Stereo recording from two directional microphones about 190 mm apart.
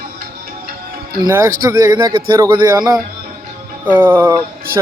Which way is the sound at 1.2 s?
15° right (ahead or behind).